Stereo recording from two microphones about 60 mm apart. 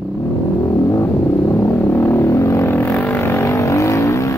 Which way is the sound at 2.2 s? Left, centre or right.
Left.